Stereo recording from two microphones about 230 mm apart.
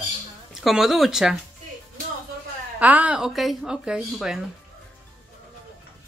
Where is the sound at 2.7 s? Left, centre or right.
Centre.